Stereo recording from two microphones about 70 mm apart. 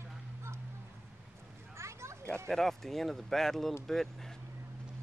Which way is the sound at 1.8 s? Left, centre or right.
Right.